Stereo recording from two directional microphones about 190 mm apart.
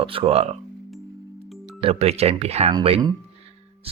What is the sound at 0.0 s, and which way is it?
Speech, 30° right (ahead or behind).